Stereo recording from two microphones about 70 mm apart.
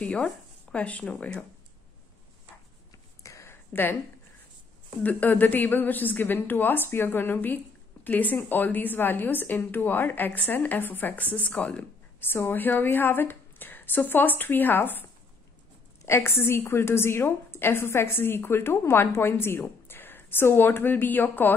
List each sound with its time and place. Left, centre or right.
0.0 s a woman's voice: centre
3.3 s a sound: left
5.0 s a woman's voice: left
16.1 s a woman's voice: left